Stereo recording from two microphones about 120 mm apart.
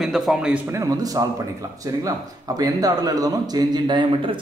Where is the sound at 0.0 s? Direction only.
Centre (ahead or behind).